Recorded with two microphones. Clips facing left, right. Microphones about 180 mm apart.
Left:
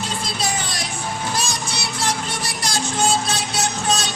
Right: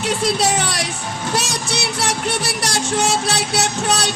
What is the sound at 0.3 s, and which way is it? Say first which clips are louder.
Music: right 8 dB; 70° right (ahead or behind).